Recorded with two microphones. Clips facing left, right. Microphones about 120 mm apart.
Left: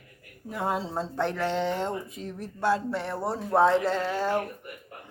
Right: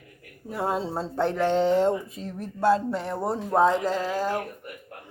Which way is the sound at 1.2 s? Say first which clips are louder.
Right 5 dB; 15° right (ahead or behind).